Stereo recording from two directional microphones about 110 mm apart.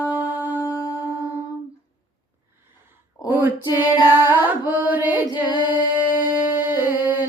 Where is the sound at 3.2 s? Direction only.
20° right (ahead or behind).